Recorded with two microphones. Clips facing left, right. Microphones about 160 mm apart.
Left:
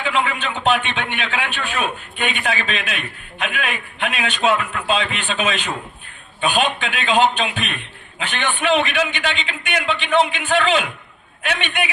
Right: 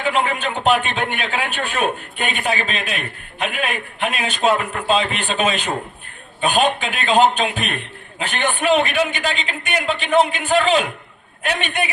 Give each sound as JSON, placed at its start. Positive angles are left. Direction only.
{"t": 0.0, "sound": "a man's voice", "side_deg": -40}